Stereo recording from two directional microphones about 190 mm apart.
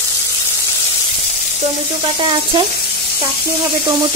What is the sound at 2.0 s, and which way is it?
Speech, 25° right (ahead or behind).